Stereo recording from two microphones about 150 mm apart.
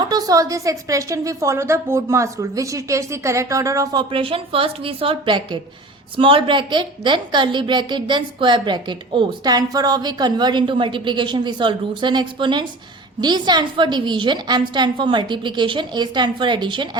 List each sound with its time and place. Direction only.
0.0 s a woman's voice: 25° right (ahead or behind)
4.1 s a woman's voice: 35° right (ahead or behind)